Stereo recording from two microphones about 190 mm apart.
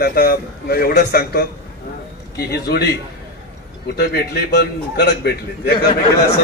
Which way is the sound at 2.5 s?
55° left (ahead or behind).